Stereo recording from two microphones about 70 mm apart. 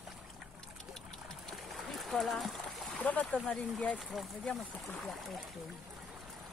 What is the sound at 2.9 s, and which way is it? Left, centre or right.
Speech, left.